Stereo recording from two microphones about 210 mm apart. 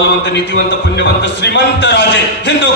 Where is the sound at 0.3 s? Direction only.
55° left (ahead or behind).